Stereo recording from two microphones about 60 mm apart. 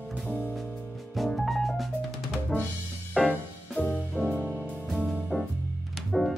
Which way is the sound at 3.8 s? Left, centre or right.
Left.